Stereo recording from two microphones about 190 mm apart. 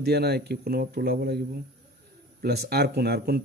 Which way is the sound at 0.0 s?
60° right (ahead or behind).